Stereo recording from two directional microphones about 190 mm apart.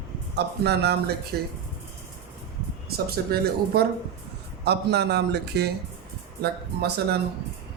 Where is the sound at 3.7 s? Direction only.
55° right (ahead or behind).